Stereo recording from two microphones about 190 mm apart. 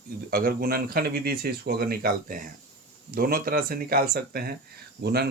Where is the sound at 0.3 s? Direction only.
50° right (ahead or behind).